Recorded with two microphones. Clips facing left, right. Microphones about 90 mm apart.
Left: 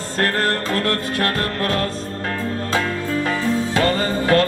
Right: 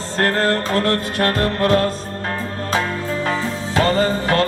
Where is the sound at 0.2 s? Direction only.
25° right (ahead or behind).